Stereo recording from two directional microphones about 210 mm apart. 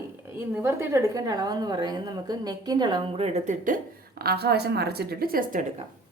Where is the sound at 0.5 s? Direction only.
10° right (ahead or behind); by 3.8 s 35° right (ahead or behind).